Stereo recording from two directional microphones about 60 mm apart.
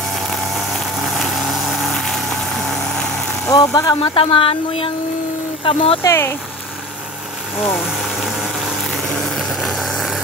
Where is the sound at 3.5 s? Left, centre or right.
Left.